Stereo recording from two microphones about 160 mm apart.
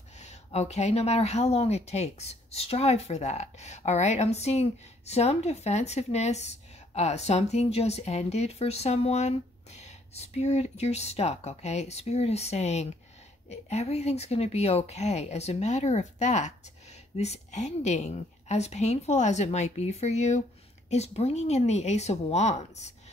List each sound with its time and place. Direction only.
0.2 s speech: 45° left (ahead or behind)